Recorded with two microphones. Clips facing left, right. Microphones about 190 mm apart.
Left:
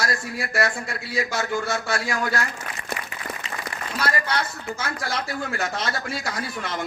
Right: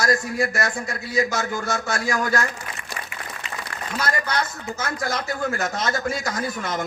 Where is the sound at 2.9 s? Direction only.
60° left (ahead or behind).